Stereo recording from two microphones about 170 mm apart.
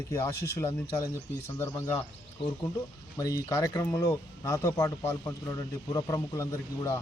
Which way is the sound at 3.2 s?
20° left (ahead or behind).